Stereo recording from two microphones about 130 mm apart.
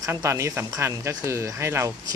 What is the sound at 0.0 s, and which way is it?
Speech, 25° right (ahead or behind).